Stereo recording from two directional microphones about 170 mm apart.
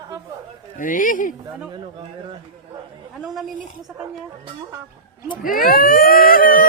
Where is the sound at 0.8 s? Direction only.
50° left (ahead or behind).